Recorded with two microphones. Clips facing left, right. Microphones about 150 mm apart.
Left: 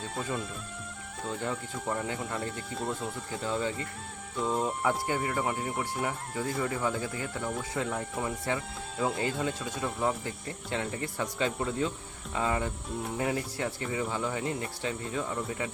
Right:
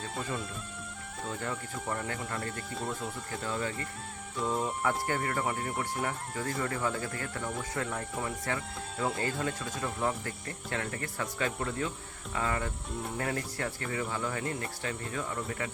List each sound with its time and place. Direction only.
0.2 s speech: centre (ahead or behind)
1.4 s speech: 10° left (ahead or behind)
3.4 s speech: 15° left (ahead or behind)
4.4 s speech: centre (ahead or behind)
10.2 s speech: 15° left (ahead or behind)